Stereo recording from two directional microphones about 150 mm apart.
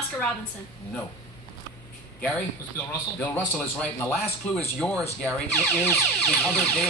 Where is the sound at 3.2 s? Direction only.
10° left (ahead or behind).